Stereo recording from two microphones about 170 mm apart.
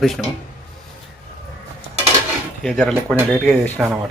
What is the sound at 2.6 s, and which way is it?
A man's voice, 5° left (ahead or behind).